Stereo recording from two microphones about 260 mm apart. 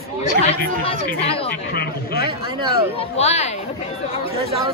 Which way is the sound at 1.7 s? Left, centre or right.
Left.